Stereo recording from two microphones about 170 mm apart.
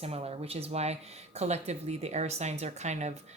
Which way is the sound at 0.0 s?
35° right (ahead or behind).